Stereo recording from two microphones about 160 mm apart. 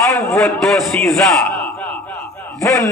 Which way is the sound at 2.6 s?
20° left (ahead or behind).